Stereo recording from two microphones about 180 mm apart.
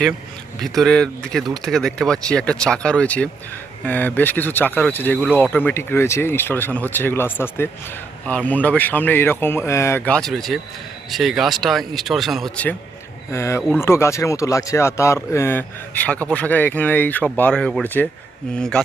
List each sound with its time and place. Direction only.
0.6 s speech: centre (ahead or behind)
13.3 s speech: 15° left (ahead or behind)